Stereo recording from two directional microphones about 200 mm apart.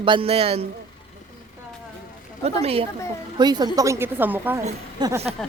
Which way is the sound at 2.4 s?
30° right (ahead or behind).